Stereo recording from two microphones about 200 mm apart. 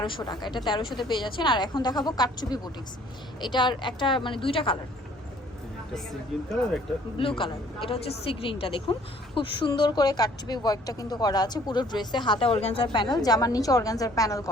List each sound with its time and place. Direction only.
0.0 s a woman's voice: 20° left (ahead or behind)
7.2 s a woman's voice: 25° left (ahead or behind)